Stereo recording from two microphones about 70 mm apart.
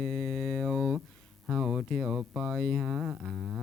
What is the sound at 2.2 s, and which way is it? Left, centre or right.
Speech, centre.